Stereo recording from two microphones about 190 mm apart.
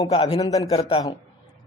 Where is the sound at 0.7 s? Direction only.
30° left (ahead or behind).